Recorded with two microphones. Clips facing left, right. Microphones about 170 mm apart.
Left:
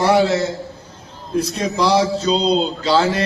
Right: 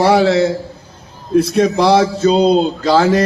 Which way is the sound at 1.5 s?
60° right (ahead or behind).